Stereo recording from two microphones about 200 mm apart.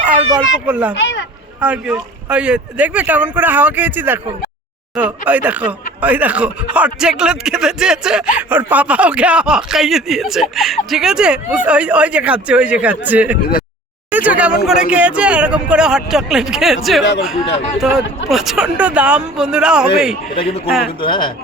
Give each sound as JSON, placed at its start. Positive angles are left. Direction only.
{"t": 0.7, "sound": "speech", "side_deg": -5}
{"t": 0.9, "sound": "speech", "side_deg": 65}
{"t": 1.6, "sound": "a man's voice", "side_deg": -5}
{"t": 21.0, "sound": "speech", "side_deg": 25}